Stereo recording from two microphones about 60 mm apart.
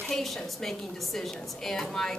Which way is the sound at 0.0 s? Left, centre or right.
Centre.